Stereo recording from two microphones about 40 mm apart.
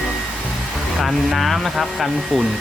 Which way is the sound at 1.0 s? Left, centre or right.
Centre.